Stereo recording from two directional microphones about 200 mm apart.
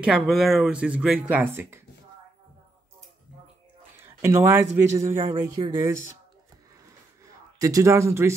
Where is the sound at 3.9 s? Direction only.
10° right (ahead or behind).